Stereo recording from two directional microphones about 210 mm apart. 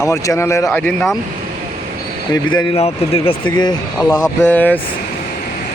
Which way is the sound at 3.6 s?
20° left (ahead or behind).